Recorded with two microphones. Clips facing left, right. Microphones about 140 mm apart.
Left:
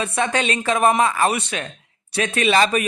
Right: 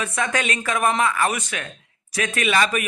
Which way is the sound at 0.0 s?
30° left (ahead or behind).